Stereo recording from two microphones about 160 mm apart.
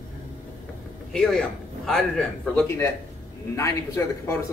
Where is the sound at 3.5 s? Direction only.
20° left (ahead or behind).